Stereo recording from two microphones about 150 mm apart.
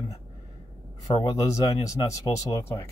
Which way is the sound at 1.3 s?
20° left (ahead or behind).